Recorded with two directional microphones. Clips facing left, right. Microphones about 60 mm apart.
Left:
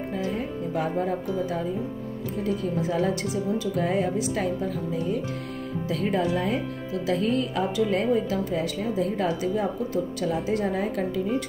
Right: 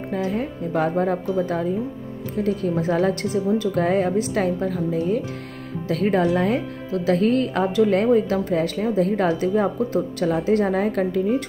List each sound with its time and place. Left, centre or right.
0.1 s speech: right
6.9 s speech: right